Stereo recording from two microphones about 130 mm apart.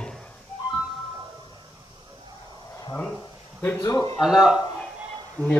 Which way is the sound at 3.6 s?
20° left (ahead or behind).